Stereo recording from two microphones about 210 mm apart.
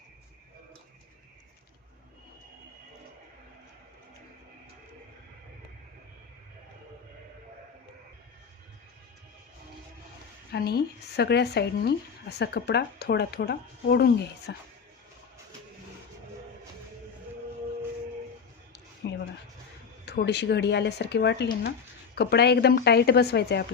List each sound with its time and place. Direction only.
10.5 s speech: 50° left (ahead or behind)
19.0 s a sound: 55° left (ahead or behind)
20.1 s speech: 55° left (ahead or behind)